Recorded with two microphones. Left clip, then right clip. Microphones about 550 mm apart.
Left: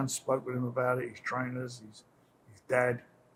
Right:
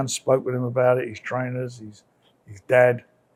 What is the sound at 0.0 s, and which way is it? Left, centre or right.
Speech, right.